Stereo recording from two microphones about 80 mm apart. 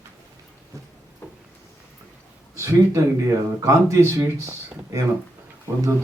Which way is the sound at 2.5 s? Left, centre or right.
Right.